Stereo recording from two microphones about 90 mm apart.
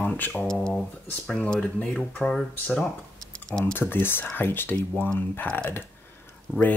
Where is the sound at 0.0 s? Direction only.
20° left (ahead or behind).